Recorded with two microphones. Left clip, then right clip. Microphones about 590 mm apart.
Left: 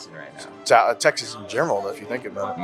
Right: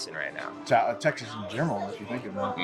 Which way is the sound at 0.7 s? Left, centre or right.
Left.